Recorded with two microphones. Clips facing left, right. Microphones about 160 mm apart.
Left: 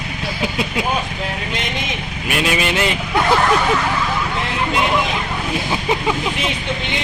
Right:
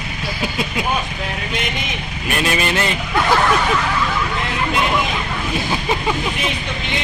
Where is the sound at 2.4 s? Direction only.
15° left (ahead or behind).